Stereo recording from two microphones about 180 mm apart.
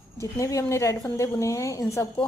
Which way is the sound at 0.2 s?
15° left (ahead or behind).